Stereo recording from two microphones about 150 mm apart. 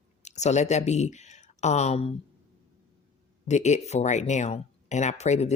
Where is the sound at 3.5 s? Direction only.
50° left (ahead or behind).